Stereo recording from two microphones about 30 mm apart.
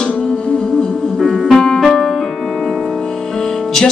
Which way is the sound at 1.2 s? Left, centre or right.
Centre.